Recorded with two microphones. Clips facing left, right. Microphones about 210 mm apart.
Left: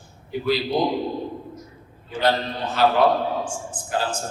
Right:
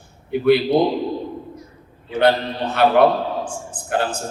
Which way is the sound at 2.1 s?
60° right (ahead or behind).